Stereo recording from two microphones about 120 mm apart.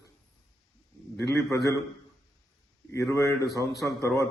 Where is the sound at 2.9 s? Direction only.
25° left (ahead or behind).